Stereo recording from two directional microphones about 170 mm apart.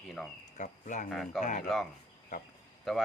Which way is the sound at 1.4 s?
45° left (ahead or behind).